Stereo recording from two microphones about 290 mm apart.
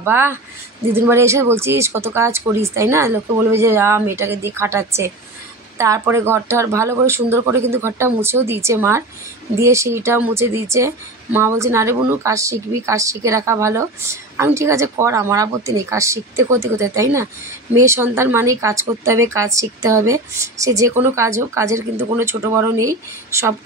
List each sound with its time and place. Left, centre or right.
0.0 s speech: centre